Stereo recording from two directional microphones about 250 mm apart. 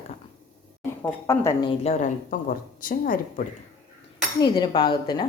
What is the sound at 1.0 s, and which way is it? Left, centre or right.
A woman's voice, centre.